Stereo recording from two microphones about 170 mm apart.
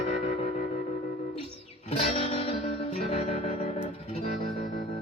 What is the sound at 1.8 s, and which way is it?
Music, 40° left (ahead or behind).